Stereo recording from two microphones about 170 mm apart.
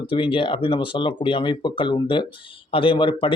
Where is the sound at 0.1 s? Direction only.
30° left (ahead or behind).